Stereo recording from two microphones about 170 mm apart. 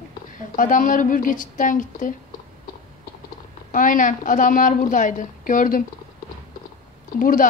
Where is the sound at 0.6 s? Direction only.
50° left (ahead or behind).